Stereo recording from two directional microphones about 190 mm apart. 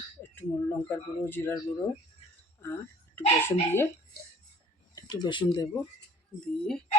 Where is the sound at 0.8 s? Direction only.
10° left (ahead or behind).